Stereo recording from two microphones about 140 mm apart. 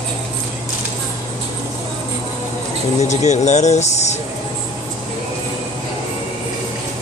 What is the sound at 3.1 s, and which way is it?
Speech, 55° left (ahead or behind).